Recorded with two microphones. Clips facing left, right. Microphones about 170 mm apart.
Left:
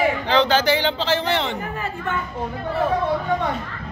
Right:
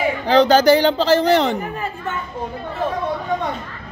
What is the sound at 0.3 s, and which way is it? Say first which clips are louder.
A man's voice: right 8 dB; 40° right (ahead or behind).